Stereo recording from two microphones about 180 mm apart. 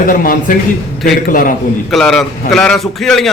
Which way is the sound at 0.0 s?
50° left (ahead or behind).